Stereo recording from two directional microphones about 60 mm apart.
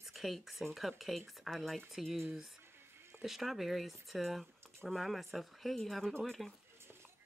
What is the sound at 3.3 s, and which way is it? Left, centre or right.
Speech, centre.